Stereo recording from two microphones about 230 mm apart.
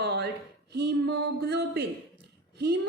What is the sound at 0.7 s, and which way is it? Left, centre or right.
Speech, right.